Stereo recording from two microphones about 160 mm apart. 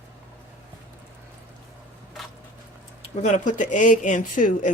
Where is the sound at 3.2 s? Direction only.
50° left (ahead or behind).